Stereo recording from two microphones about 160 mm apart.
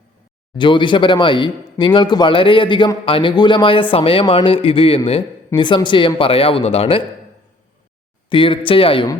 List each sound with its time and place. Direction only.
0.5 s speech: 30° left (ahead or behind)
8.3 s speech: 35° left (ahead or behind)